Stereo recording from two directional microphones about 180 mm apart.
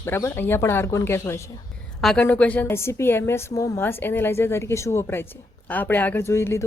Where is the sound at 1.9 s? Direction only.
5° left (ahead or behind).